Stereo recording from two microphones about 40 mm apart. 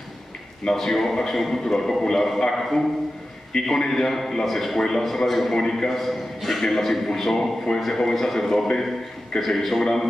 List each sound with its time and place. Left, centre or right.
0.7 s a man's voice: centre
5.6 s a man's voice: centre